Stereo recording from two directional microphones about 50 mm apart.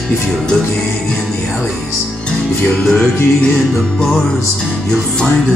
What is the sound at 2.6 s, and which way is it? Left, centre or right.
Music, centre.